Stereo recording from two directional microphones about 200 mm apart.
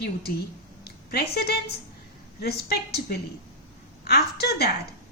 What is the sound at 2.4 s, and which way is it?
A woman's voice, 55° left (ahead or behind).